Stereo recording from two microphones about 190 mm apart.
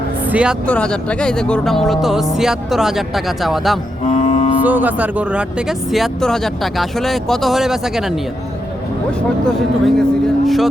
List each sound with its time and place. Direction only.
0.3 s speech: 5° right (ahead or behind)
0.7 s speech: 5° left (ahead or behind)
4.1 s vehicle: 35° left (ahead or behind)
4.6 s speech: 10° right (ahead or behind)
9.5 s speech: centre (ahead or behind)